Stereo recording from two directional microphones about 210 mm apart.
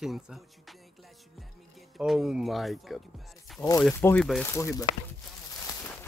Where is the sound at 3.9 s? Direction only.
10° left (ahead or behind).